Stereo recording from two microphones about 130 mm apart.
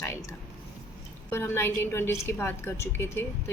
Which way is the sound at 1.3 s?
20° left (ahead or behind).